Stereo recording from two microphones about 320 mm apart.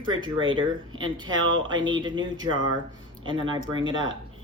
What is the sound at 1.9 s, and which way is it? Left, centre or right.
Speech, centre.